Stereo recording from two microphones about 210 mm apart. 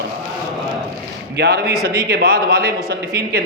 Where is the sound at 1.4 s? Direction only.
50° right (ahead or behind).